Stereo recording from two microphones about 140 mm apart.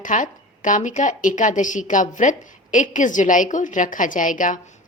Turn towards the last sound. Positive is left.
turn(degrees=70)  # may be behind; listen again after turning